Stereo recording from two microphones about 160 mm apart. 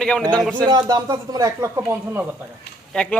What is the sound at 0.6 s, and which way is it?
Speech, 25° right (ahead or behind).